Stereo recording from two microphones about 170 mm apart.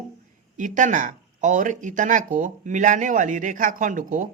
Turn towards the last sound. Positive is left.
turn(degrees=-50)  # may be behind; listen again after turning